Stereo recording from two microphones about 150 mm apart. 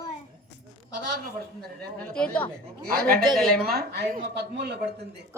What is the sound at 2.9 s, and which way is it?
A man's voice, 85° right.